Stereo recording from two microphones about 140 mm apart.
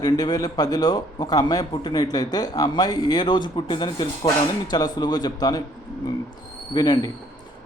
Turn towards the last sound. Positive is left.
turn(degrees=30)  # may be behind; listen again after turning